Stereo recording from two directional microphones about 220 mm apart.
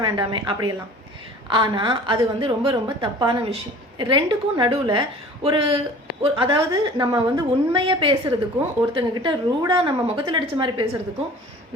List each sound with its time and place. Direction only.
0.0 s a woman's voice: 20° right (ahead or behind)